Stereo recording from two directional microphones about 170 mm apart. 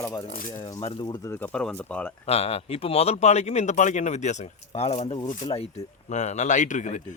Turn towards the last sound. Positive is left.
turn(degrees=45)  # may be behind; listen again after turning